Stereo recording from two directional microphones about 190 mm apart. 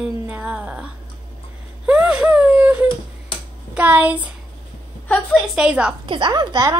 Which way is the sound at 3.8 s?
10° right (ahead or behind).